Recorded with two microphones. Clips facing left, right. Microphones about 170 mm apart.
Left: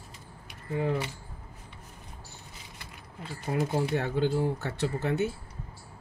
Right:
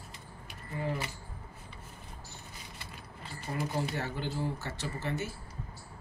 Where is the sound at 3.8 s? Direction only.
60° left (ahead or behind).